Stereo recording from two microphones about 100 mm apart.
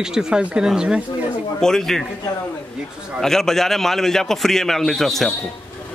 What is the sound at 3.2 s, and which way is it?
A man's voice, 5° left (ahead or behind).